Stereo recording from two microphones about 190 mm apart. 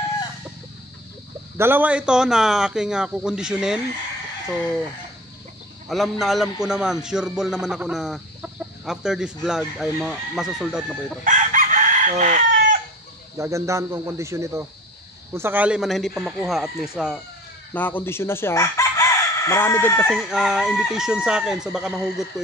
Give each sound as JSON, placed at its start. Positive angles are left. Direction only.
{"t": 1.6, "sound": "a man's voice", "side_deg": -10}
{"t": 5.9, "sound": "a man's voice", "side_deg": 0}
{"t": 11.2, "sound": "chicken", "side_deg": -40}
{"t": 13.4, "sound": "a man's voice", "side_deg": -15}
{"t": 17.7, "sound": "chicken", "side_deg": 10}
{"t": 20.2, "sound": "a man's voice", "side_deg": -5}